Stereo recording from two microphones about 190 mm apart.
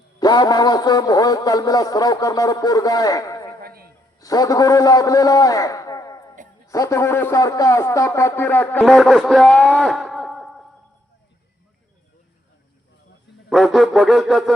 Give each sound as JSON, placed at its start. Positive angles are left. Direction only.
{"t": 0.2, "sound": "speech", "side_deg": 20}
{"t": 3.6, "sound": "a sound", "side_deg": -55}
{"t": 4.2, "sound": "a man's voice", "side_deg": 20}
{"t": 13.5, "sound": "music", "side_deg": 0}